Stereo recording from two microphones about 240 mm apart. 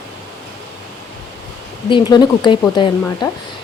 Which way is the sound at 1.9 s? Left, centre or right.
Centre.